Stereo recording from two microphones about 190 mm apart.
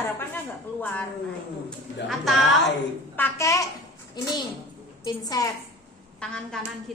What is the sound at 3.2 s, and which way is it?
A child's voice, 15° left (ahead or behind).